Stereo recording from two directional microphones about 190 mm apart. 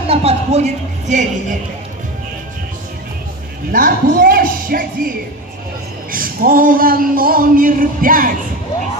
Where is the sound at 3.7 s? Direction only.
45° right (ahead or behind).